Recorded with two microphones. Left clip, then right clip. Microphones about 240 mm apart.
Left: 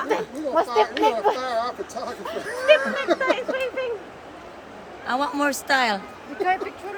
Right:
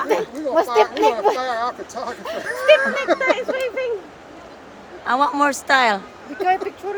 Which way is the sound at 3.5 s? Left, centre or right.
Right.